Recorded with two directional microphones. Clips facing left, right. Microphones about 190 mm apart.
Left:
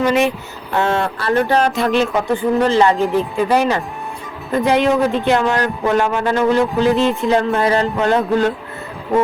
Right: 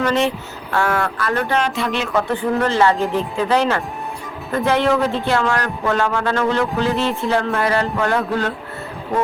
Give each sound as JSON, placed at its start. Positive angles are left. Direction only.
{"t": 0.0, "sound": "speech", "side_deg": 10}
{"t": 0.7, "sound": "speech", "side_deg": 25}
{"t": 2.1, "sound": "speech", "side_deg": 10}